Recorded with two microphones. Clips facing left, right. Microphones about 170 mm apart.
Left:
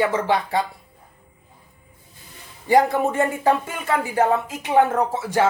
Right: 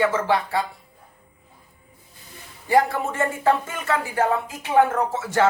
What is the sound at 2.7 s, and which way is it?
Speech, 15° left (ahead or behind).